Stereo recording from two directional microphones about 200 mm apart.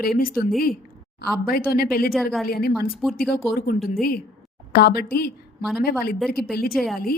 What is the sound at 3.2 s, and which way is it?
Speech, 50° left (ahead or behind).